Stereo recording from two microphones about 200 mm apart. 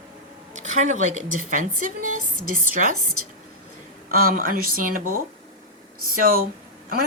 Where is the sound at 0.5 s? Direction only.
35° right (ahead or behind).